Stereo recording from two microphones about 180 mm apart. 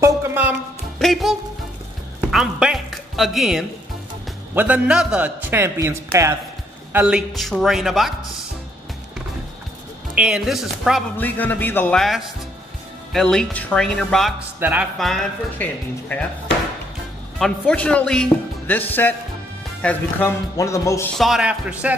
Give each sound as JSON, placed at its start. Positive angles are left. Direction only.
{"t": 0.0, "sound": "music", "side_deg": -15}
{"t": 0.9, "sound": "music", "side_deg": 0}
{"t": 2.3, "sound": "a man's voice", "side_deg": -5}
{"t": 10.1, "sound": "speech", "side_deg": -5}
{"t": 11.1, "sound": "speech", "side_deg": 10}
{"t": 14.6, "sound": "a man's voice", "side_deg": -10}
{"t": 15.0, "sound": "speech", "side_deg": 0}
{"t": 17.4, "sound": "speech", "side_deg": 5}
{"t": 21.2, "sound": "speech", "side_deg": -5}